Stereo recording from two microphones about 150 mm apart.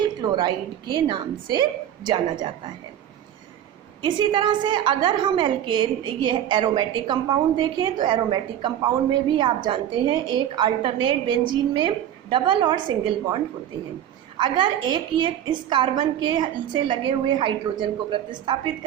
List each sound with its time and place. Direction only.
0.2 s a woman's voice: 25° right (ahead or behind)
4.0 s a woman's voice: 30° right (ahead or behind)